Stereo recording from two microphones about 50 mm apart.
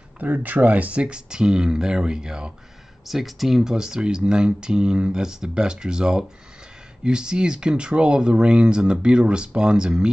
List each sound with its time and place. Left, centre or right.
0.2 s speech: right; by 2.5 s centre
3.1 s speech: centre